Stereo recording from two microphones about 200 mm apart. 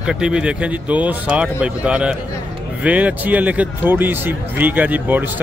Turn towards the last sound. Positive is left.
turn(degrees=-10)  # may be behind; listen again after turning